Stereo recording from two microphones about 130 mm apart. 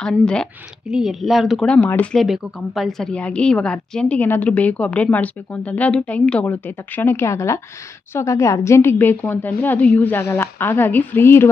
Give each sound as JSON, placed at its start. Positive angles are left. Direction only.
{"t": 0.0, "sound": "a woman's voice", "side_deg": 5}
{"t": 0.8, "sound": "speech", "side_deg": -5}
{"t": 1.7, "sound": "a woman's voice", "side_deg": 10}
{"t": 2.2, "sound": "a woman's voice", "side_deg": 0}